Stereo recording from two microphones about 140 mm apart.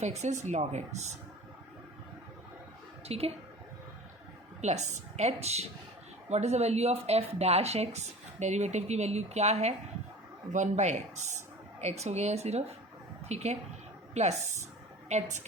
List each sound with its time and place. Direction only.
0.0 s speech: 55° right (ahead or behind)
3.1 s speech: 45° right (ahead or behind)
4.6 s speech: 55° right (ahead or behind)